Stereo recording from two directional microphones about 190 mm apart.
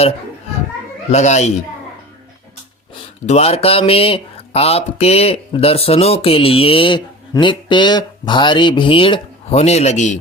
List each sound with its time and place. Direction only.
1.1 s speech: 35° left (ahead or behind)
3.2 s speech: 35° left (ahead or behind)